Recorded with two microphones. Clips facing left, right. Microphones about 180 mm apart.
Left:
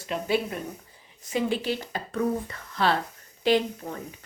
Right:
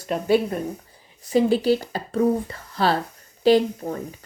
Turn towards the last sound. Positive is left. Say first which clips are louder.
# right 6 dB
turn(degrees=-35)  # may be behind; listen again after turning